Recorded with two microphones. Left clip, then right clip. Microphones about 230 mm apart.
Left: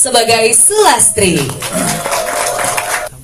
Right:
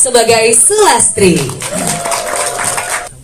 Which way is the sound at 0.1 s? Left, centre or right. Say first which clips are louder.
Right 1 dB; left.